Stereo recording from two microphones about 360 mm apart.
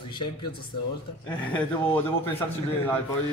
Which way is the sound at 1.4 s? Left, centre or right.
Centre.